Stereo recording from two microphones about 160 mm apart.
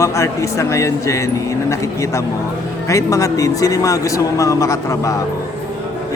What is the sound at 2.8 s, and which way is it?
Speech, 20° left (ahead or behind).